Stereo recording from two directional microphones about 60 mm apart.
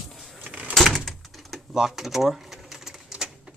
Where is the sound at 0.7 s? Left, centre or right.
Centre.